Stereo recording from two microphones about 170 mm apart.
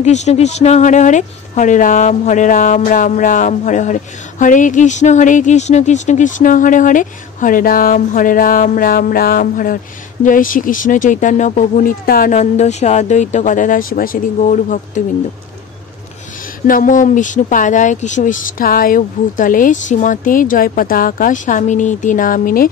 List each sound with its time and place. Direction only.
0.0 s speech: 40° left (ahead or behind)
12.4 s speech: 40° left (ahead or behind)
16.6 s speech: 55° left (ahead or behind)